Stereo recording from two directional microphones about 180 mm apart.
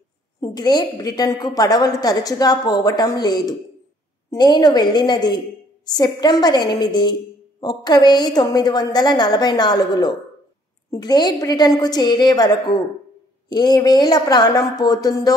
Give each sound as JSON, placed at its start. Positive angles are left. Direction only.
{"t": 0.4, "sound": "a woman's voice", "side_deg": 20}